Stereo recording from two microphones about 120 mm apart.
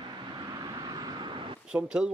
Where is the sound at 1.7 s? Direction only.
10° right (ahead or behind).